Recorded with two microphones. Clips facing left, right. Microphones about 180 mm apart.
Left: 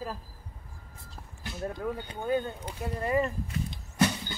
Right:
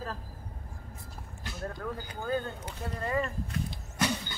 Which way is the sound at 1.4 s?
20° left (ahead or behind).